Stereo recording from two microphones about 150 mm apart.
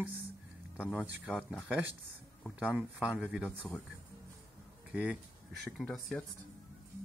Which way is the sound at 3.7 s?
20° left (ahead or behind).